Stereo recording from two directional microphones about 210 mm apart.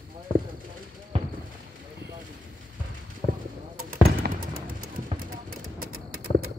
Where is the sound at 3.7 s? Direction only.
45° right (ahead or behind).